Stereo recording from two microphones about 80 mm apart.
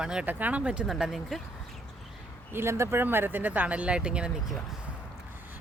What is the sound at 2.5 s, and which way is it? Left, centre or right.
Speech, right.